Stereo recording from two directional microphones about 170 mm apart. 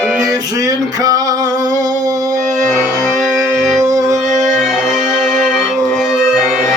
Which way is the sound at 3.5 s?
20° right (ahead or behind).